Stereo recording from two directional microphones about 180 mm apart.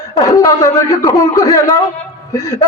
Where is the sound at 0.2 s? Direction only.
20° left (ahead or behind).